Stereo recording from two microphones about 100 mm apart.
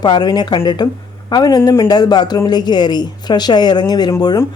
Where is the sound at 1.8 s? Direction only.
45° left (ahead or behind).